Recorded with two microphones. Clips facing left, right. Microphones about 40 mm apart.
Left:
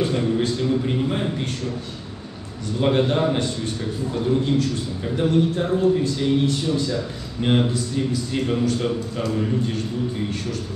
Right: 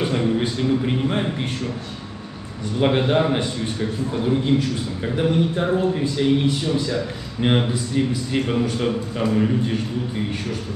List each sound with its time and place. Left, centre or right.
0.0 s a man's voice: centre
2.8 s a man's voice: right